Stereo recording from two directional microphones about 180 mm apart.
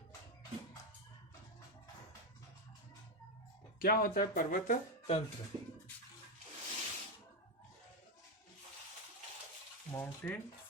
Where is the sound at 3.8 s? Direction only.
55° left (ahead or behind).